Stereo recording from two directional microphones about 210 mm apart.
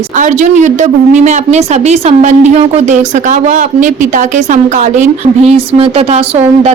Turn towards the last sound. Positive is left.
turn(degrees=-30)  # may be behind; listen again after turning